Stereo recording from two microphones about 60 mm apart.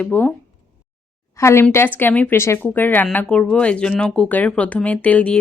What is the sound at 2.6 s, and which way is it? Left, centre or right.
Speech, left.